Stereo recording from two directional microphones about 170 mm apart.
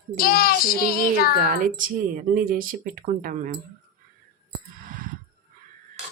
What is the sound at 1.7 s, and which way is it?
Speech, 55° right (ahead or behind).